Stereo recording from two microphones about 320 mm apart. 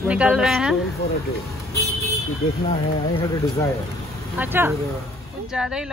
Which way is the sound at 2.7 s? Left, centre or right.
Centre.